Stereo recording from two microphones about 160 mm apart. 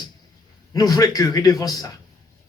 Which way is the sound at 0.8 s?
25° left (ahead or behind).